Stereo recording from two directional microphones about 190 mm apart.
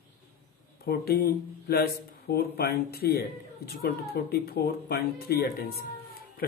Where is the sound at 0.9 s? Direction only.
50° left (ahead or behind).